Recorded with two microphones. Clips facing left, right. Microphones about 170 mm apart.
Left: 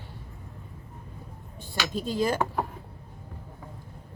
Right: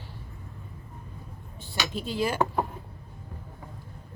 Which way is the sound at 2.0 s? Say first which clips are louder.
Left 2 dB; 40° left (ahead or behind).